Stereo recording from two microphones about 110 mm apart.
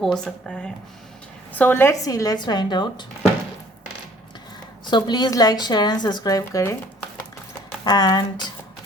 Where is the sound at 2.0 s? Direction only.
35° left (ahead or behind).